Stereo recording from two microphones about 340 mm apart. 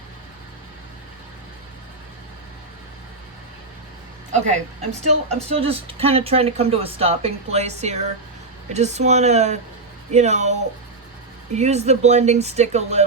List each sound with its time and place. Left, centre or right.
4.3 s a woman's voice: right